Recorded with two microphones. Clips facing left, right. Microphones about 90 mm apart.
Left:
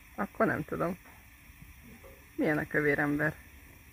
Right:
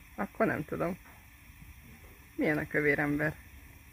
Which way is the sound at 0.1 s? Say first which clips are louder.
Left 1 dB; 20° left (ahead or behind).